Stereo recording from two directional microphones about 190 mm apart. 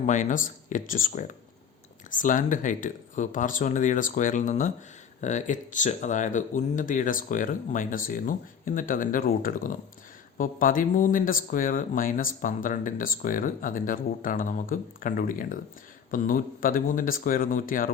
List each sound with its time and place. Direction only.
0.0 s speech: 40° left (ahead or behind)